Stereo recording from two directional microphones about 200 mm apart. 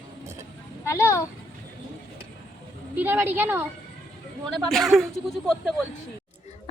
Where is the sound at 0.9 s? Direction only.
15° left (ahead or behind).